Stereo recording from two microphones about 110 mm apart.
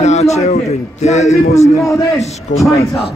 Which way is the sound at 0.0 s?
90° left.